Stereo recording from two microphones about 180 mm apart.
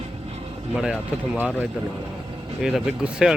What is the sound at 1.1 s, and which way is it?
Speech, 10° right (ahead or behind).